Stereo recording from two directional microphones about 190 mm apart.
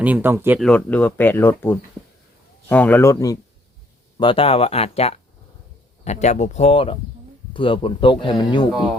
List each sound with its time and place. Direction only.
0.0 s speech: 10° right (ahead or behind)
0.6 s speech: 5° left (ahead or behind)
4.2 s speech: 25° left (ahead or behind)